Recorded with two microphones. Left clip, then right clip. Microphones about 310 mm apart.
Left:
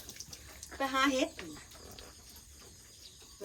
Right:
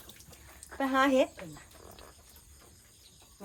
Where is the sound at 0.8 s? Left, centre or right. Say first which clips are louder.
Right 4 dB; centre.